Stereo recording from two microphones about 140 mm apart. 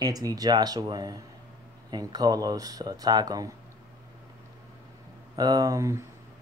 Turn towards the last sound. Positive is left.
turn(degrees=-25)  # may be behind; listen again after turning